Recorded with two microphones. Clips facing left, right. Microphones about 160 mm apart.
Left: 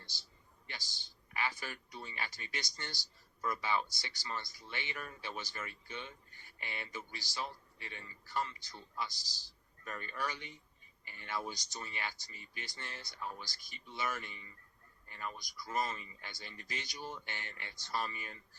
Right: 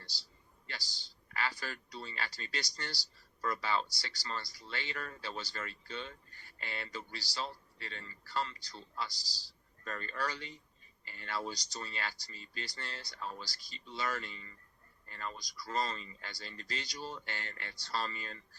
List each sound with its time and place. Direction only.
0.0 s a man's voice: 20° left (ahead or behind)